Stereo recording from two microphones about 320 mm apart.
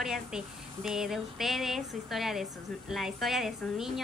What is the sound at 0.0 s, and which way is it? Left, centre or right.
A woman's voice, centre.